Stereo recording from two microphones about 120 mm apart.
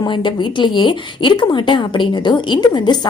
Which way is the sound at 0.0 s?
40° left (ahead or behind).